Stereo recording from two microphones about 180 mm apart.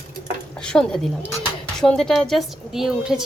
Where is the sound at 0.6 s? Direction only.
5° left (ahead or behind).